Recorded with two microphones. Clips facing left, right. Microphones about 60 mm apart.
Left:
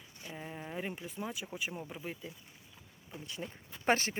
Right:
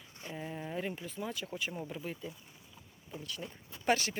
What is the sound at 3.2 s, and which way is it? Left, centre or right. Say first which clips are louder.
Speech: left 3 dB; left.